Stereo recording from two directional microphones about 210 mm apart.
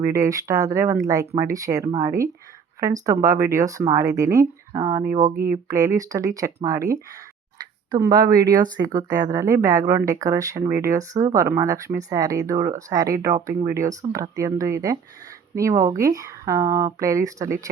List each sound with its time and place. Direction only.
0.0 s speech: 15° right (ahead or behind)